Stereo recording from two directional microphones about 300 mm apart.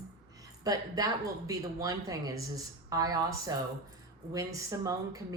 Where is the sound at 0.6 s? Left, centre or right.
Centre.